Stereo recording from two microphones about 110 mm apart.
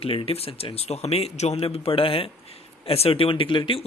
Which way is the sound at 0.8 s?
75° left (ahead or behind).